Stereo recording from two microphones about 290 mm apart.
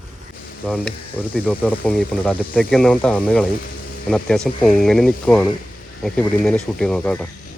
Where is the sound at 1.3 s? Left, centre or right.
Centre.